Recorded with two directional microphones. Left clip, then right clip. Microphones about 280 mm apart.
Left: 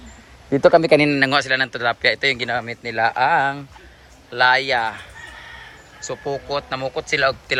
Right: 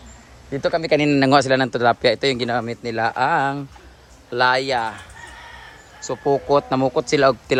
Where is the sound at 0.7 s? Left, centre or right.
Centre.